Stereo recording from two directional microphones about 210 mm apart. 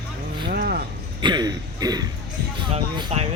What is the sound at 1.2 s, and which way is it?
Speech, 20° right (ahead or behind).